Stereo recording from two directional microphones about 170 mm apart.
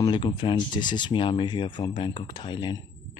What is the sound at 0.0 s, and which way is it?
Speech, 30° left (ahead or behind).